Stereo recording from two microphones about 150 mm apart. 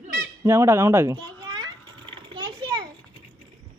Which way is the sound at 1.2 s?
30° right (ahead or behind).